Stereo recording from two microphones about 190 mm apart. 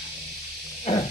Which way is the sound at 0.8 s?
30° left (ahead or behind).